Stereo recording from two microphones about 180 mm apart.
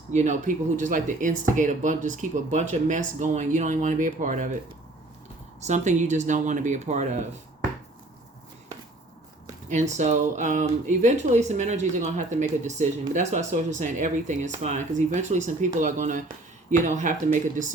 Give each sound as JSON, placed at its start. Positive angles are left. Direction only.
{"t": 0.1, "sound": "speech", "side_deg": -40}
{"t": 5.5, "sound": "speech", "side_deg": -40}
{"t": 10.0, "sound": "speech", "side_deg": -40}